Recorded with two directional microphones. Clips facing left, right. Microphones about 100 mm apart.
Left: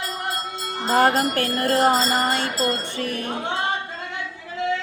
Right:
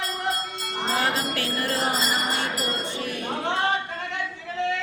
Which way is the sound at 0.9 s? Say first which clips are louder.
Left 9 dB; 50° left (ahead or behind).